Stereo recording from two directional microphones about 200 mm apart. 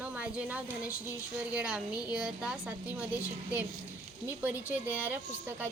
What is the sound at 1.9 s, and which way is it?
Speech, 20° left (ahead or behind).